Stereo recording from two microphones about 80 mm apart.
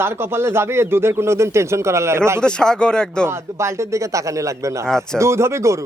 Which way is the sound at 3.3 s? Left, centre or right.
Right.